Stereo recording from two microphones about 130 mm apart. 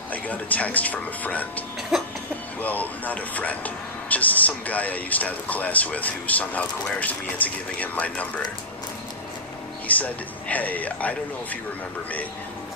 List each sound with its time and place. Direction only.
0.1 s speech: 10° left (ahead or behind)
1.9 s cough: centre (ahead or behind)
2.6 s speech: 10° left (ahead or behind)
9.8 s speech: 10° left (ahead or behind)